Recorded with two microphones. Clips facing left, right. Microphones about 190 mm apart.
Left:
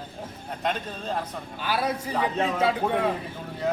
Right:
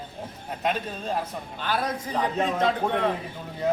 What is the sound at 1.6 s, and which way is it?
A man's voice, 10° left (ahead or behind).